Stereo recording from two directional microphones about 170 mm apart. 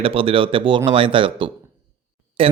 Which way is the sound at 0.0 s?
35° right (ahead or behind).